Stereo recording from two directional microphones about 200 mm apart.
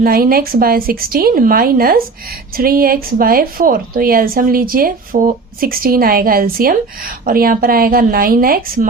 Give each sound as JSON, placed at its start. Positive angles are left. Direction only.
{"t": 0.0, "sound": "a woman's voice", "side_deg": -45}